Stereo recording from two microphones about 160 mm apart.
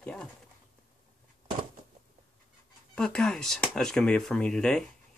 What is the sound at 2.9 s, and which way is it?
Speech, 5° left (ahead or behind).